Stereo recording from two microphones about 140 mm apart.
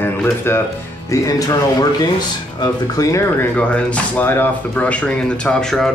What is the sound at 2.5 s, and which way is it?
Speech, 25° left (ahead or behind).